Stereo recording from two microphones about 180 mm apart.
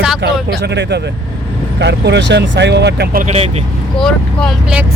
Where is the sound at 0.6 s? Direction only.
70° right (ahead or behind).